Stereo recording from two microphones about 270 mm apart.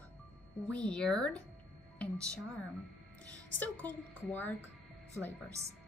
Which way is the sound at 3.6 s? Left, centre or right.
Centre.